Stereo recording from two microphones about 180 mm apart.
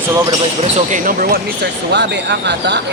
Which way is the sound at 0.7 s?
45° right (ahead or behind).